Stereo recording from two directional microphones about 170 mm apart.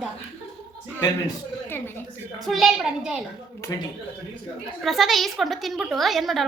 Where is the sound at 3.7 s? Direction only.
20° left (ahead or behind).